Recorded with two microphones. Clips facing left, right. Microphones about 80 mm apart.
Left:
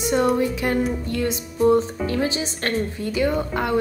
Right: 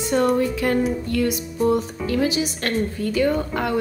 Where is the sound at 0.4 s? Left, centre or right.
Centre.